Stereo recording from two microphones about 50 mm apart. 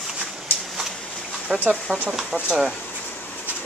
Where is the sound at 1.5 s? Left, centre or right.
Centre.